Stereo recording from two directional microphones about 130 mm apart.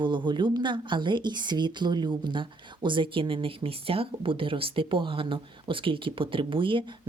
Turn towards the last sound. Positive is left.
turn(degrees=-40)  # may be behind; listen again after turning